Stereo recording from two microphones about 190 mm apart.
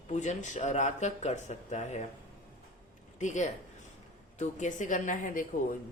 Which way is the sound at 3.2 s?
40° left (ahead or behind).